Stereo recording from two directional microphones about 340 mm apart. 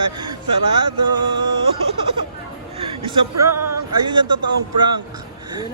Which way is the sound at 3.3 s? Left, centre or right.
Right.